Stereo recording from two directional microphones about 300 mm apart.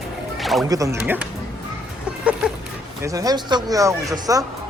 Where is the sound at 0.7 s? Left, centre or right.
Centre.